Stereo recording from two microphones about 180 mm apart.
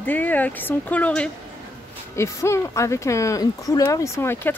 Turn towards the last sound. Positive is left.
turn(degrees=15)  # may be behind; listen again after turning